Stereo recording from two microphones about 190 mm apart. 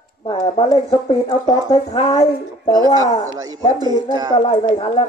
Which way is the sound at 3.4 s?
20° right (ahead or behind).